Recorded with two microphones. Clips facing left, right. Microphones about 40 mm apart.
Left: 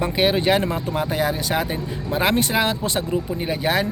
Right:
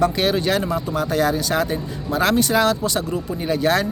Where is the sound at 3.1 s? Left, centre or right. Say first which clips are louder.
Right 1 dB; centre.